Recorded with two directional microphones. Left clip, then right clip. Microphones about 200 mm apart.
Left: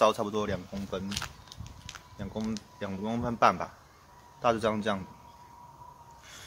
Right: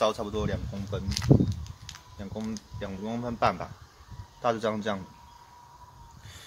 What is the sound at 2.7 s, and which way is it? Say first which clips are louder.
Speech: even; 5° left (ahead or behind).